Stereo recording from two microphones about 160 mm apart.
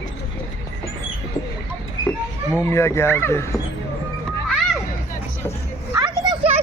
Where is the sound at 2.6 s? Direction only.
15° left (ahead or behind).